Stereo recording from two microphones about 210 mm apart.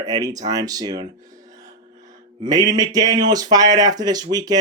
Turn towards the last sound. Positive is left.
turn(degrees=-20)  # may be behind; listen again after turning